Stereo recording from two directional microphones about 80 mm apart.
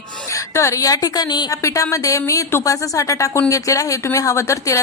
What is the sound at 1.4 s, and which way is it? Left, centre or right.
A woman's voice, left.